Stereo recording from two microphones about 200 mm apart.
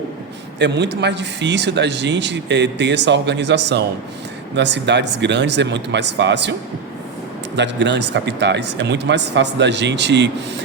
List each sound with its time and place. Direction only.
0.6 s speech: 60° right (ahead or behind)
7.5 s speech: 60° right (ahead or behind)